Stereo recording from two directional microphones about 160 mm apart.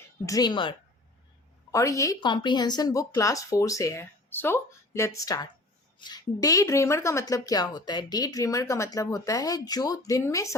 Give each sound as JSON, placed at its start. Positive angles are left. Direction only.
{"t": 0.3, "sound": "speech", "side_deg": 25}
{"t": 1.7, "sound": "speech", "side_deg": 20}